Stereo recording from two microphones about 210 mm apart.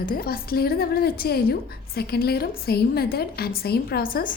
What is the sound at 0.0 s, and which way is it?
A woman's voice, 45° left (ahead or behind).